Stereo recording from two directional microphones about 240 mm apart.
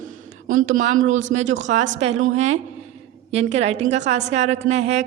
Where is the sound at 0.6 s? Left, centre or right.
Right.